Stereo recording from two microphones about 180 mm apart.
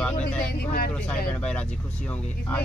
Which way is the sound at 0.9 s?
10° left (ahead or behind).